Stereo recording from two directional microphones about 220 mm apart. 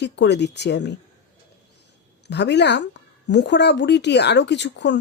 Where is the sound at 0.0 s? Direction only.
50° left (ahead or behind).